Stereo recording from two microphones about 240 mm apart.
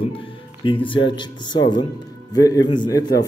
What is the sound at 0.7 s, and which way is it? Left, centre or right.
A man's voice, centre.